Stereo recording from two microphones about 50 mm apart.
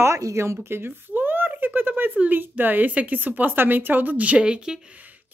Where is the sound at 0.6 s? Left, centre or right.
Right.